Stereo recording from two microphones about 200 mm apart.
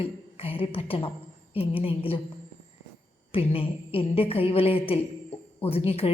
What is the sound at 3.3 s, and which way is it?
A woman's voice, 25° left (ahead or behind).